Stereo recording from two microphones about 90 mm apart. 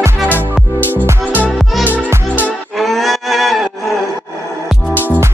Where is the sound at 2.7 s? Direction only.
Centre (ahead or behind).